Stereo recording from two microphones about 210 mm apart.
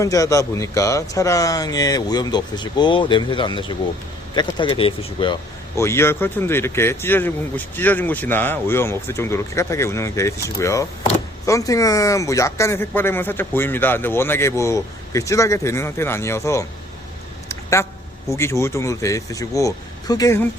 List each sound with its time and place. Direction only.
0.0 s speech: 15° left (ahead or behind)
18.3 s speech: 15° left (ahead or behind)